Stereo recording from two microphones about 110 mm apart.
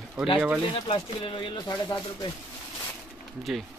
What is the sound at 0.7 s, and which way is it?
Speech, 50° left (ahead or behind).